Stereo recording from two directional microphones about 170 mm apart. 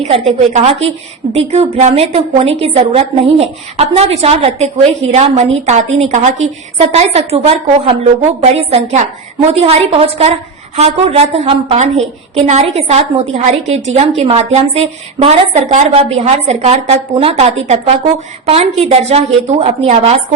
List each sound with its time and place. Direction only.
0.0 s a woman's voice: 40° right (ahead or behind)